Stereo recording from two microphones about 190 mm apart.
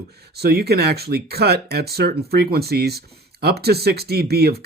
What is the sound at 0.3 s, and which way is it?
Speech, 55° right (ahead or behind).